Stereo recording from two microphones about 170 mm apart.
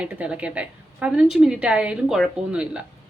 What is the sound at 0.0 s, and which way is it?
A woman's voice, 10° right (ahead or behind).